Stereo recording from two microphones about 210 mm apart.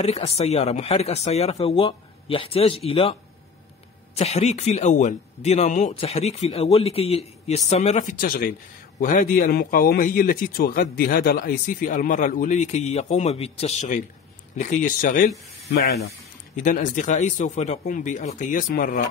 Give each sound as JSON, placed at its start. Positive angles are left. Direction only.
{"t": 0.0, "sound": "a man's voice", "side_deg": 30}
{"t": 16.6, "sound": "a man's voice", "side_deg": 35}